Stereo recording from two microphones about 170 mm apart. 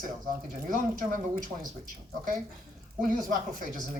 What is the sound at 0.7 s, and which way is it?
Speech, 55° right (ahead or behind).